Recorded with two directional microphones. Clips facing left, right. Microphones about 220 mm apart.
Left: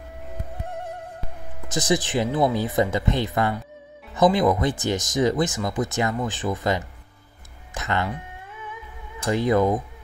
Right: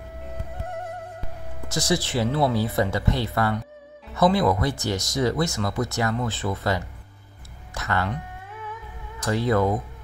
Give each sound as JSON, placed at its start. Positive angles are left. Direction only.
{"t": 1.7, "sound": "speech", "side_deg": 20}
{"t": 9.2, "sound": "speech", "side_deg": 15}